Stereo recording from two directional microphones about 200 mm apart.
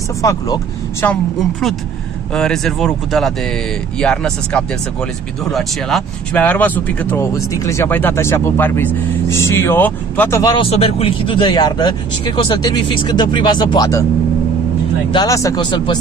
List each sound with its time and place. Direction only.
0.2 s speech: 15° left (ahead or behind)
2.3 s speech: 5° left (ahead or behind)
15.1 s speech: 15° left (ahead or behind)